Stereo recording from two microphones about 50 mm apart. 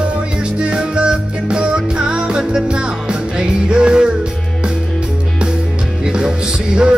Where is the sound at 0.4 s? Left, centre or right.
Centre.